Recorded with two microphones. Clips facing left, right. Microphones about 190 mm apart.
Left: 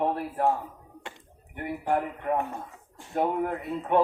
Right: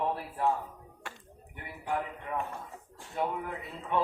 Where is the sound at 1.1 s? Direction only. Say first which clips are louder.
Left 3 dB; 20° left (ahead or behind).